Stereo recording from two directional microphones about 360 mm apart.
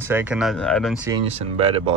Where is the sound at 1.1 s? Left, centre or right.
Centre.